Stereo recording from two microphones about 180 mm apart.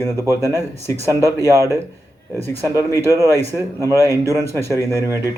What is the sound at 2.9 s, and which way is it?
Speech, 20° right (ahead or behind).